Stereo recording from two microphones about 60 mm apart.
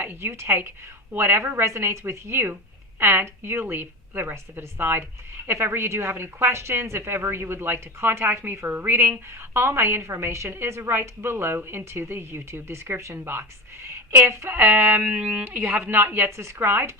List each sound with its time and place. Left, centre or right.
0.0 s a woman's voice: right